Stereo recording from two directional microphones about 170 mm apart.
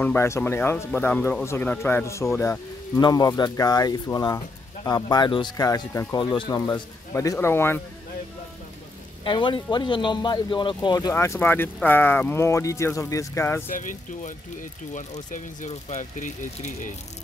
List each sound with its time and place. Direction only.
0.0 s speech: 15° left (ahead or behind)
9.2 s speech: 30° left (ahead or behind)
13.7 s speech: 50° left (ahead or behind)